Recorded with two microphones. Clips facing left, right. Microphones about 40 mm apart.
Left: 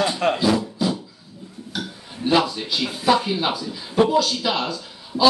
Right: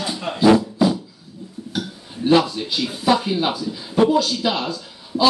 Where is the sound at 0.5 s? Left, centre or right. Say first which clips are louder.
Right 5 dB; centre.